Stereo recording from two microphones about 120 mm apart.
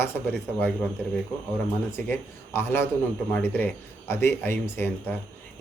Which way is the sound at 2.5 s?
20° left (ahead or behind).